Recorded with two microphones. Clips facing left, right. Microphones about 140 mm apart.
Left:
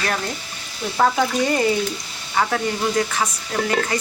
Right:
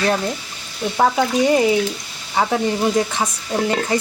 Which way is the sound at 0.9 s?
10° right (ahead or behind).